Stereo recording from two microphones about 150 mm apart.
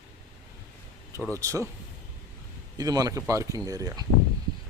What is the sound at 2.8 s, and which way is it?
Speech, 25° right (ahead or behind).